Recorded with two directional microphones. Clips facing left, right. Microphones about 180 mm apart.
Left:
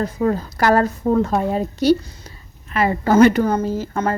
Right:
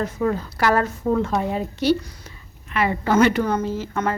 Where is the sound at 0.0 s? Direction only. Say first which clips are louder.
Left 3 dB; 35° left (ahead or behind).